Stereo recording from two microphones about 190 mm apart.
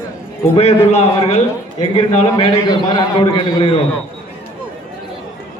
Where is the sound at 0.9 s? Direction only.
35° left (ahead or behind).